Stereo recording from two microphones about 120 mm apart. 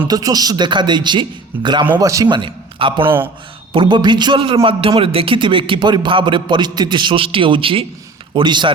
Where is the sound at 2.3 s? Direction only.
45° right (ahead or behind).